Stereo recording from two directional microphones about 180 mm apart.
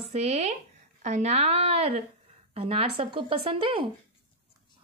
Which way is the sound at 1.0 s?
40° right (ahead or behind).